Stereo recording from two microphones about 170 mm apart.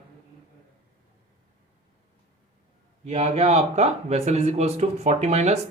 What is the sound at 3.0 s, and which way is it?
Speech, 40° right (ahead or behind).